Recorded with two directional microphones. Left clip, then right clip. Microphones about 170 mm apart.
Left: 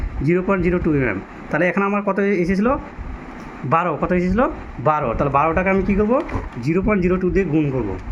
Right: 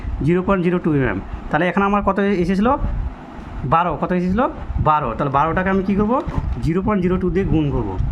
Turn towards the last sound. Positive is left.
turn(degrees=-30)  # may be behind; listen again after turning